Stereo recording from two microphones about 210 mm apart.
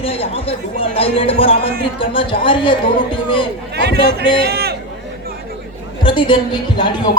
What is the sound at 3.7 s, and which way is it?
A man's voice, 50° right (ahead or behind).